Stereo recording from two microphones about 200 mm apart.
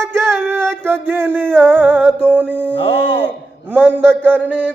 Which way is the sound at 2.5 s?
10° left (ahead or behind).